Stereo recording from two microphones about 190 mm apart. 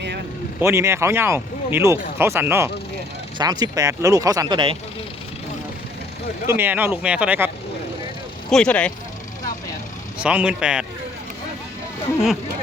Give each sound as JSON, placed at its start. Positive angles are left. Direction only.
{"t": 0.6, "sound": "speech", "side_deg": -15}
{"t": 6.5, "sound": "speech", "side_deg": -10}
{"t": 8.4, "sound": "speech", "side_deg": 5}
{"t": 10.2, "sound": "speech", "side_deg": -5}